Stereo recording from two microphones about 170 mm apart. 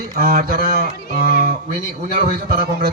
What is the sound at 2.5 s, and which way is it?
Speech, 60° right (ahead or behind).